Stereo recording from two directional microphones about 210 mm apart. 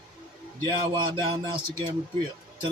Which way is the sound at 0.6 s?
25° right (ahead or behind).